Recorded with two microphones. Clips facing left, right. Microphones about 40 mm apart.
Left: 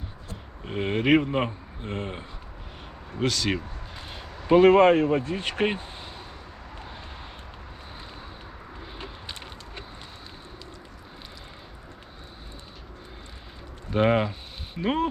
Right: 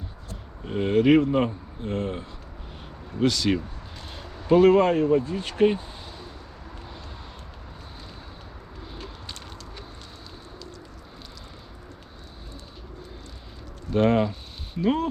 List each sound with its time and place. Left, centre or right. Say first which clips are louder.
0.6 s speech: right 5 dB; centre
3.2 s speech: right 3 dB; centre
4.1 s speech: even; centre; by 5.8 s left
8.8 s a sound: right 1 dB; left
13.9 s speech: right 1 dB; centre